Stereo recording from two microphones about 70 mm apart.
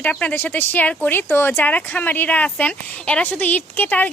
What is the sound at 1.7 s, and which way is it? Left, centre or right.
A woman's voice, left.